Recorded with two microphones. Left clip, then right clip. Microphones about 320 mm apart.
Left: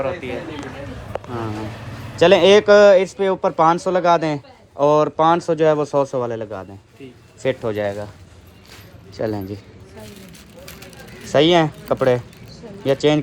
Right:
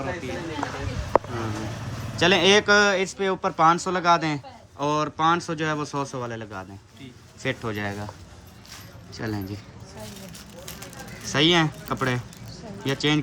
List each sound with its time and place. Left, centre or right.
1.1 s a sound: left
2.1 s speech: centre
9.1 s speech: centre
11.3 s speech: centre